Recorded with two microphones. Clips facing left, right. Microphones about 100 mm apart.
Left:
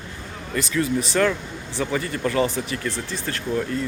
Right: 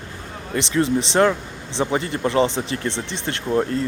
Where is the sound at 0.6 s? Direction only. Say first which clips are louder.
Right 3 dB; 25° right (ahead or behind).